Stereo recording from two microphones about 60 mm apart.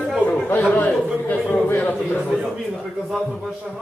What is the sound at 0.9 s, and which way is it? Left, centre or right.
Speech, centre.